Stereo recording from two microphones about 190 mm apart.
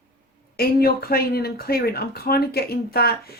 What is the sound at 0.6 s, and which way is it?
Speech, 55° left (ahead or behind).